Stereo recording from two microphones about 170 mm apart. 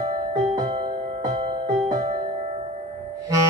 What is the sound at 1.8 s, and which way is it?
Music, 40° right (ahead or behind).